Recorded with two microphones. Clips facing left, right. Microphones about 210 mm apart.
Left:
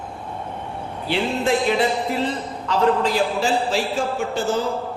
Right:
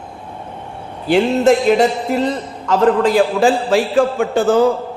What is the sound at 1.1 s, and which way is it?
A man's voice, 45° right (ahead or behind).